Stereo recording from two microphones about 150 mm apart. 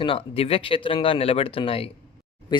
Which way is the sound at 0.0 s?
40° left (ahead or behind).